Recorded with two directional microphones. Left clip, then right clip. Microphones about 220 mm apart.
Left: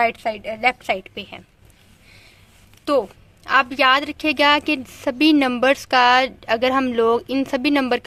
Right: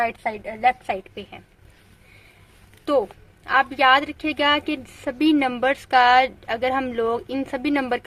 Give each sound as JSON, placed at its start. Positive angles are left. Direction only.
{"t": 0.0, "sound": "a woman's voice", "side_deg": 30}
{"t": 3.4, "sound": "a woman's voice", "side_deg": 25}